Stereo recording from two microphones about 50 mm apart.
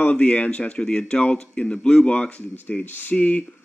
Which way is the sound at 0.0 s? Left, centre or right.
Left.